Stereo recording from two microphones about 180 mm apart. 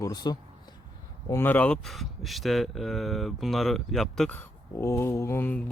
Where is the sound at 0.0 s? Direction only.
25° left (ahead or behind).